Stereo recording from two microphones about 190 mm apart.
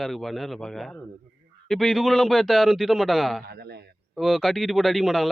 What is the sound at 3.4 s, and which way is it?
Speech, 60° right (ahead or behind).